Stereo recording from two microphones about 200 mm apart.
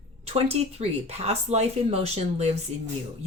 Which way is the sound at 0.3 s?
30° right (ahead or behind).